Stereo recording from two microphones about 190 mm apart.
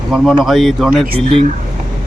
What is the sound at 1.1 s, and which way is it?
Speech, 35° right (ahead or behind).